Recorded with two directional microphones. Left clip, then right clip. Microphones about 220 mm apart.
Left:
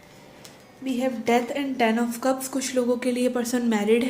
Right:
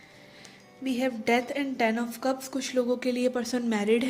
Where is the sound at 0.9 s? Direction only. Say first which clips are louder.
Left 3 dB; 30° right (ahead or behind).